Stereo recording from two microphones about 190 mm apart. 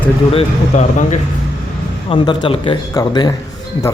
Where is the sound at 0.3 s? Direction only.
40° left (ahead or behind).